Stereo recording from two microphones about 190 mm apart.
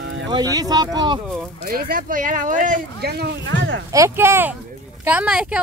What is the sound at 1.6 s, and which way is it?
Speech, 50° right (ahead or behind).